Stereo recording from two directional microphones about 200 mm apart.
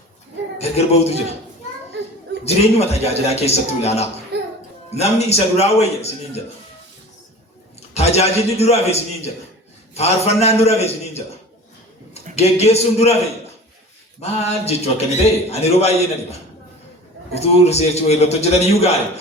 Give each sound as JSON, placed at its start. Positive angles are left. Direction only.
{"t": 0.6, "sound": "a man's voice", "side_deg": 30}
{"t": 2.4, "sound": "a man's voice", "side_deg": 30}
{"t": 4.3, "sound": "a sound", "side_deg": -55}
{"t": 4.9, "sound": "a man's voice", "side_deg": 30}
{"t": 7.8, "sound": "a man's voice", "side_deg": 30}
{"t": 12.4, "sound": "a man's voice", "side_deg": 30}
{"t": 14.2, "sound": "a man's voice", "side_deg": 30}